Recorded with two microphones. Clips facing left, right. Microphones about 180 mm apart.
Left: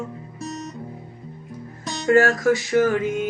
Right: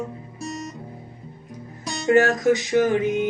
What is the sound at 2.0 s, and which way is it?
Music, 20° right (ahead or behind).